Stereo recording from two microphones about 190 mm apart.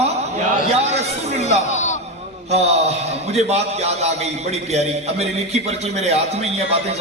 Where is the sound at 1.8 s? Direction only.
40° left (ahead or behind).